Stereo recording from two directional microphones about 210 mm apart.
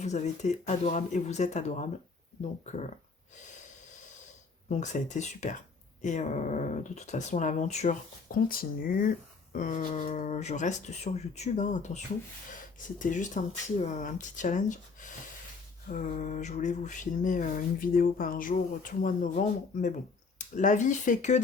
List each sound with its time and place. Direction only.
0.0 s speech: 35° left (ahead or behind)
4.7 s speech: 35° left (ahead or behind)
13.0 s speech: 40° left (ahead or behind)